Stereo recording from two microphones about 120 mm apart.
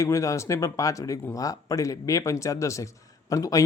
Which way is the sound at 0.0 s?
25° left (ahead or behind).